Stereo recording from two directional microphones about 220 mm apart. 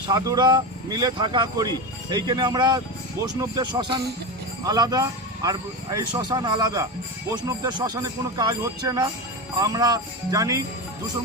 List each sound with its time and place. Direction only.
0.1 s a man's voice: 20° right (ahead or behind)